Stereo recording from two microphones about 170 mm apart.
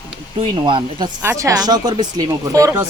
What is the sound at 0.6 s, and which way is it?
Speech, 30° right (ahead or behind).